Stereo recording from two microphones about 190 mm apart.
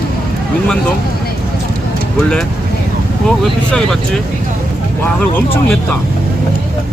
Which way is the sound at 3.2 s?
Centre (ahead or behind).